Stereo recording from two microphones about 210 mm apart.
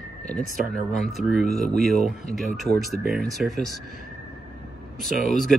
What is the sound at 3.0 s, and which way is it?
Speech, 45° right (ahead or behind).